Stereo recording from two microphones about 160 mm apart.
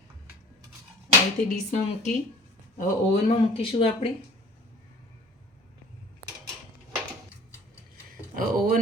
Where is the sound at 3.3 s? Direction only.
35° left (ahead or behind).